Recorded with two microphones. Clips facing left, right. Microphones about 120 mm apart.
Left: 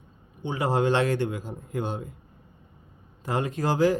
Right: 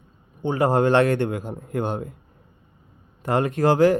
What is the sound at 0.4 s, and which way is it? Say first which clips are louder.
A man's voice: right 5 dB; 50° right (ahead or behind).